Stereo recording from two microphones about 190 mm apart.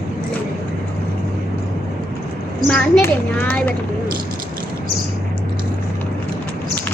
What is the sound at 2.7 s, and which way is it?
Speech, 10° left (ahead or behind).